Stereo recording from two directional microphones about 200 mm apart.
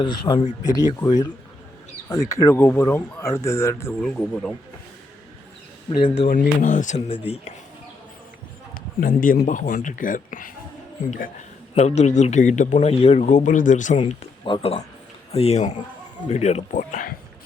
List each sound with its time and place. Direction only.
0.0 s speech: 25° left (ahead or behind); by 4.5 s 5° left (ahead or behind)
5.9 s speech: 25° left (ahead or behind)
6.2 s speech: 40° left (ahead or behind)
8.7 s speech: 45° left (ahead or behind)
11.7 s speech: 35° left (ahead or behind)
14.0 s speech: 25° left (ahead or behind); by 17.2 s 40° left (ahead or behind)